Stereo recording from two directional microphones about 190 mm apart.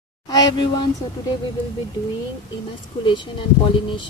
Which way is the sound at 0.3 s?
20° left (ahead or behind).